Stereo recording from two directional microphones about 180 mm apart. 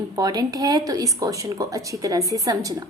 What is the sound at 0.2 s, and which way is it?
A woman's voice, 20° right (ahead or behind).